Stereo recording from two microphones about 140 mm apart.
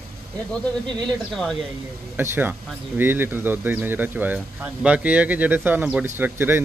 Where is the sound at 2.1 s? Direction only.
15° right (ahead or behind).